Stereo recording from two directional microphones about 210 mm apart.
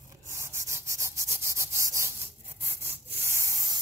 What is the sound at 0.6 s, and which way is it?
Rub, 15° right (ahead or behind).